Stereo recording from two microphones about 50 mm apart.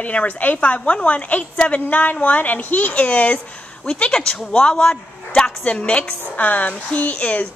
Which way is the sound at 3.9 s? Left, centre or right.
Centre.